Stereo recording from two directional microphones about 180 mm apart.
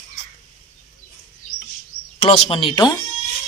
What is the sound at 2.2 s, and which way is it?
Speech, 30° left (ahead or behind).